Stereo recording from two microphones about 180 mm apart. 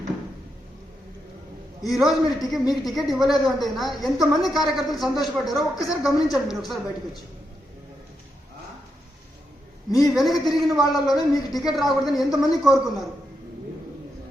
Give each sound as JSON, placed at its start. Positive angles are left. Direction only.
{"t": 1.8, "sound": "a man's voice", "side_deg": 0}
{"t": 10.0, "sound": "a man's voice", "side_deg": 0}